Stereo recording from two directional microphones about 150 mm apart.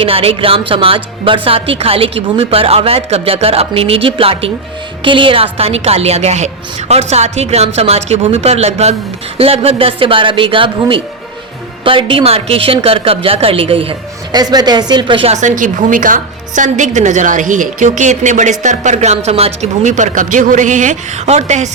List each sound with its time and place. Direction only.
0.0 s a woman's voice: 40° right (ahead or behind)
14.3 s speech: 25° right (ahead or behind)
15.4 s a woman's voice: 60° right (ahead or behind)